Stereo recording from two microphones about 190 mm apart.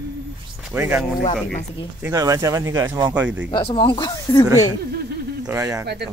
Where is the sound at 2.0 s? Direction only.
20° right (ahead or behind).